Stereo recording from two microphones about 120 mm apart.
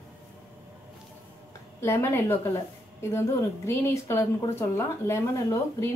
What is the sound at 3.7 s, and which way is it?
Speech, 25° left (ahead or behind).